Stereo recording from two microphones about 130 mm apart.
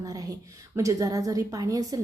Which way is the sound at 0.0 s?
25° right (ahead or behind).